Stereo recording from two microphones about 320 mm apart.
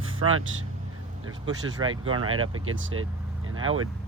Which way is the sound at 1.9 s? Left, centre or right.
Right.